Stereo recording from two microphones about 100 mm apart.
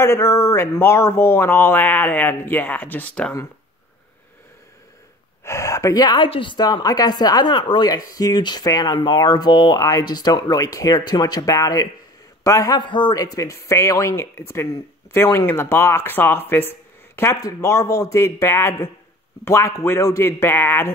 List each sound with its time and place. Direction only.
0.0 s speech: 25° left (ahead or behind)
5.4 s speech: 30° left (ahead or behind)
6.2 s speech: 60° left (ahead or behind); by 12.8 s 35° left (ahead or behind)
12.8 s speech: 50° left (ahead or behind); by 20.9 s 20° left (ahead or behind)